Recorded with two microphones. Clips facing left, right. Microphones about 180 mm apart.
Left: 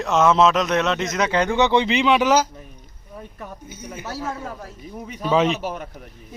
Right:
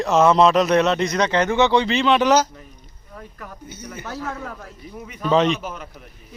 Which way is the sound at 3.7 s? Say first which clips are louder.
Right 1 dB; 10° left (ahead or behind).